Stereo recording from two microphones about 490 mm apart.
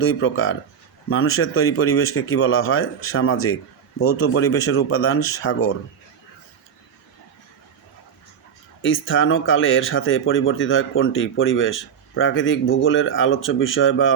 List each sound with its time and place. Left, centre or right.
0.0 s speech: left
8.8 s speech: left